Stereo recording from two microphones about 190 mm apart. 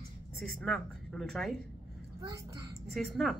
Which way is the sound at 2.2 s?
15° right (ahead or behind).